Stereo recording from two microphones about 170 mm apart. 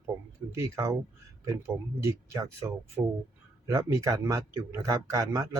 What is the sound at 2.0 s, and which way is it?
Speech, 20° right (ahead or behind).